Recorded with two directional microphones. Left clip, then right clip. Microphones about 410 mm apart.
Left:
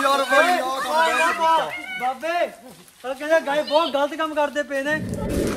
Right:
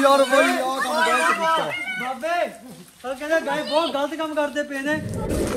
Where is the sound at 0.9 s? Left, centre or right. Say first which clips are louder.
Left 1 dB; left.